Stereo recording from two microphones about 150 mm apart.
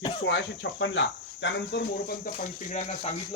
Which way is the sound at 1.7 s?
90° left.